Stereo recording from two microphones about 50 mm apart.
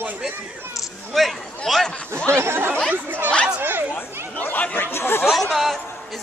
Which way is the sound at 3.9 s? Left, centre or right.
Left.